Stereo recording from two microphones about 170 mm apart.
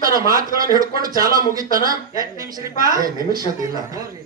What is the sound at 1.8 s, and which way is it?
A man's voice, 20° right (ahead or behind).